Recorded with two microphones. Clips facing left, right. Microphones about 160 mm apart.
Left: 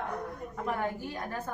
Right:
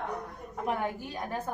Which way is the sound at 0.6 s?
20° right (ahead or behind).